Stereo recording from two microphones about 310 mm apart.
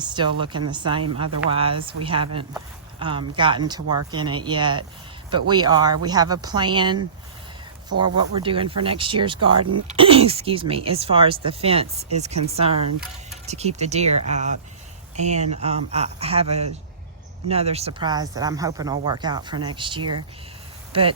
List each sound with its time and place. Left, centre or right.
0.0 s speech: centre
9.5 s speech: right
10.0 s speech: centre